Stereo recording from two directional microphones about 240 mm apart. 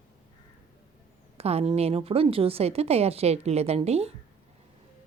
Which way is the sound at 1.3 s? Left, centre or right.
Right.